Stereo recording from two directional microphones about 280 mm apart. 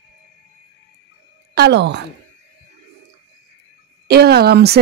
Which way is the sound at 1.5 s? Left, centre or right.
Right.